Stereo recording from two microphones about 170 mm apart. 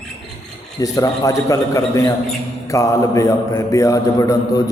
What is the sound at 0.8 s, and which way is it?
A man's voice, 20° left (ahead or behind).